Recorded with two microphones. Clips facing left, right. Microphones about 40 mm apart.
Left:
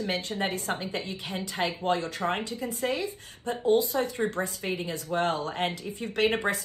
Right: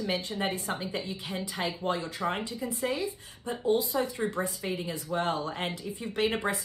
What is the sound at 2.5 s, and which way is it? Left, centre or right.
A woman's voice, left.